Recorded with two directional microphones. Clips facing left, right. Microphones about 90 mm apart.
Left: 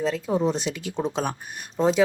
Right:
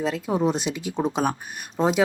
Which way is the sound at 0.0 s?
15° right (ahead or behind).